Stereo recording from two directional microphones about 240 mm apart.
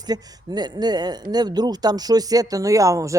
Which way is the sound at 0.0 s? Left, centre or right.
Centre.